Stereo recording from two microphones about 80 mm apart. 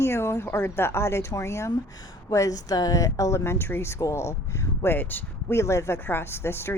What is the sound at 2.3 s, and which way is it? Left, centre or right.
Speech, left.